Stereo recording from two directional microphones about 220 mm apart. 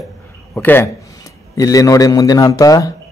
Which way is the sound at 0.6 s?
10° left (ahead or behind).